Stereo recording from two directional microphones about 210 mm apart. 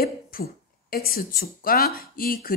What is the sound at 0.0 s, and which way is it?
Speech, 45° left (ahead or behind).